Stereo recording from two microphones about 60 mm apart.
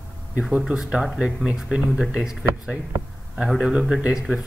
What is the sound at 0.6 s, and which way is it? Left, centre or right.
Speech, centre.